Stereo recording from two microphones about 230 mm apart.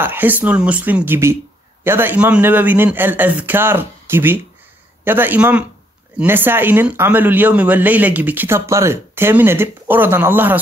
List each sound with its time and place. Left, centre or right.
0.0 s speech: centre